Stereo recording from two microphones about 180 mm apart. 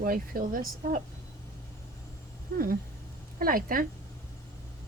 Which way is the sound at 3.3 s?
50° right (ahead or behind).